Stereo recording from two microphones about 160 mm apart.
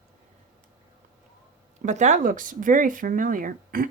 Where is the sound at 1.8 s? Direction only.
50° right (ahead or behind).